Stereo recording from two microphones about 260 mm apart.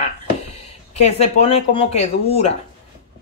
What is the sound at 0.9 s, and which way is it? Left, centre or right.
Speech, left.